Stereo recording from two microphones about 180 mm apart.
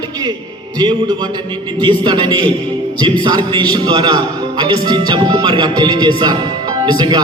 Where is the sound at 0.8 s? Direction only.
25° right (ahead or behind).